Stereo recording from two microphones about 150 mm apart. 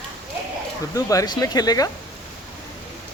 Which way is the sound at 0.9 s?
25° left (ahead or behind).